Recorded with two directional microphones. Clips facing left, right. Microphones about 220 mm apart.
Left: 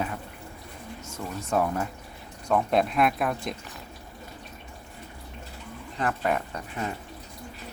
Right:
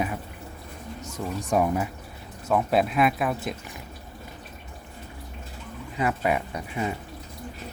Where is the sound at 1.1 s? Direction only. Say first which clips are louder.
Right 2 dB; 15° right (ahead or behind).